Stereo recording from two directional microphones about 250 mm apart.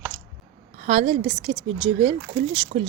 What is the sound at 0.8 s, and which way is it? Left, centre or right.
Speech, right.